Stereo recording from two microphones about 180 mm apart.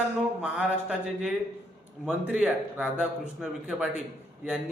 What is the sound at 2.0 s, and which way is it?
A man's voice, 5° right (ahead or behind).